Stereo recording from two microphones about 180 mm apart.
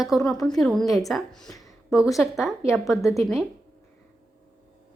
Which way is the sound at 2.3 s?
Centre (ahead or behind).